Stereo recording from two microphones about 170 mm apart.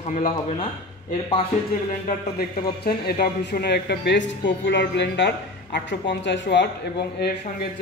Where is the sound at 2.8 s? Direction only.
65° left (ahead or behind); by 6.7 s 90° left.